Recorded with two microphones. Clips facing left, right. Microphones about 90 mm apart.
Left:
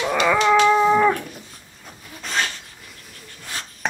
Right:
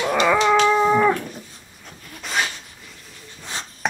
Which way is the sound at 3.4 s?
25° right (ahead or behind).